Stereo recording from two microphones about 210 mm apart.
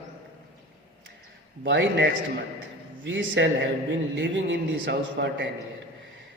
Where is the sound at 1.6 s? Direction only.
60° right (ahead or behind).